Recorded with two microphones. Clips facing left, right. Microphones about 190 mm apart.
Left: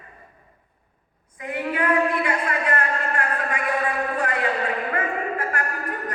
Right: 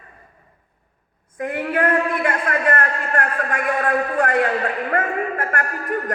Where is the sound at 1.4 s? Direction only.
50° right (ahead or behind).